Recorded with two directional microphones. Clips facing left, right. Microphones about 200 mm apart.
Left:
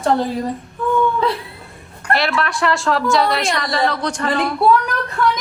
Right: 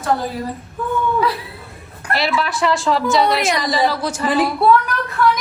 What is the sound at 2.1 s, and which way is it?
A woman's voice, centre (ahead or behind).